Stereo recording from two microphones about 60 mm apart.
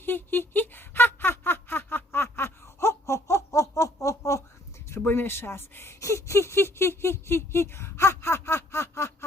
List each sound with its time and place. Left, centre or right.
0.0 s a sound: left
4.9 s speech: left
6.0 s speech: left